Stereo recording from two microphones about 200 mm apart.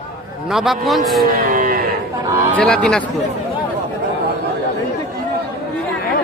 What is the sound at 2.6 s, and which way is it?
Speech, 5° left (ahead or behind).